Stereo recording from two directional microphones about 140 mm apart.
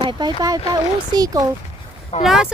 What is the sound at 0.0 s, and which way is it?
Speech, 35° right (ahead or behind).